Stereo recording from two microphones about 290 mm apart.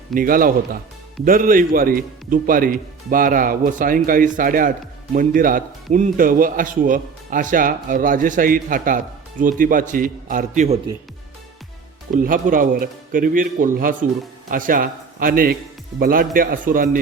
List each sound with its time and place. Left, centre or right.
0.1 s a man's voice: right
12.1 s a man's voice: right